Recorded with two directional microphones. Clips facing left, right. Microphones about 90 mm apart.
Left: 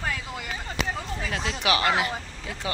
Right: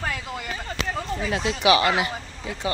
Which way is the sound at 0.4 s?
5° left (ahead or behind).